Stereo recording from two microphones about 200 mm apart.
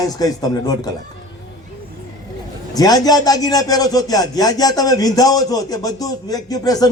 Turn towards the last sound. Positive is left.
turn(degrees=20)  # may be behind; listen again after turning